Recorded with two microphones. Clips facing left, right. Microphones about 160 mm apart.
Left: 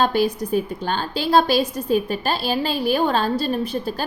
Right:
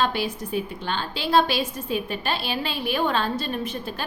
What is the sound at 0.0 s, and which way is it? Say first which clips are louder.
A woman's voice: left 6 dB; 40° left (ahead or behind).